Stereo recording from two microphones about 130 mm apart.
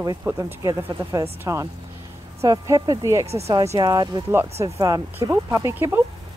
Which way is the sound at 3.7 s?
30° right (ahead or behind).